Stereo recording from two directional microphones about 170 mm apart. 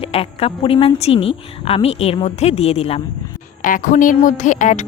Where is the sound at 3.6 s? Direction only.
50° left (ahead or behind).